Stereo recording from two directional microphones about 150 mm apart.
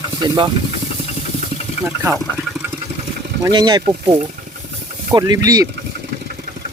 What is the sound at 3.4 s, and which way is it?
Speech, 30° right (ahead or behind).